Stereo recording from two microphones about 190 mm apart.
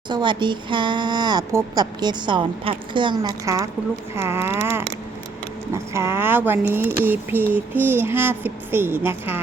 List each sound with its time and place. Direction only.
0.1 s speech: 25° right (ahead or behind)